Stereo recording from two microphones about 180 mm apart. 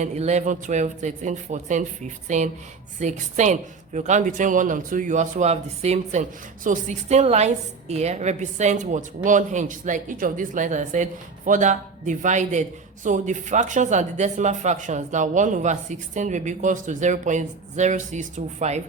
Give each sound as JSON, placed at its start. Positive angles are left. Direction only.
{"t": 0.0, "sound": "a man's voice", "side_deg": -40}